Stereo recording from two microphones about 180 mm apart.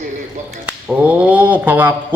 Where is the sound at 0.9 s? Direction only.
10° right (ahead or behind).